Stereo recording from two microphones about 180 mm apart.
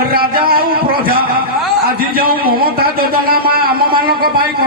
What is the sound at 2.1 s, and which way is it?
Speech, 55° right (ahead or behind).